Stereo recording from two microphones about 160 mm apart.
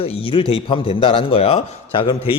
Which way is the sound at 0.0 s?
35° left (ahead or behind).